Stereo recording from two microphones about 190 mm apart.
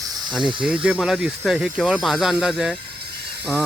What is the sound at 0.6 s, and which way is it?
Speech, 5° right (ahead or behind).